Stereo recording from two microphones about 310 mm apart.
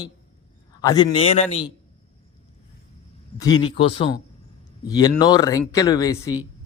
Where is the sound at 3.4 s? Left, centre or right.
Centre.